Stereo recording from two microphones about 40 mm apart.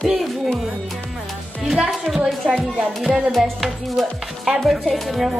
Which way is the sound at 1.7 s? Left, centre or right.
Centre.